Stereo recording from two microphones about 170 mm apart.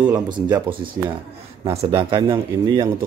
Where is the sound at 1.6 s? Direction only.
35° right (ahead or behind).